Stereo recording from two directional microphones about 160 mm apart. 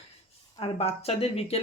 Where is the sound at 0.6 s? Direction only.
40° left (ahead or behind).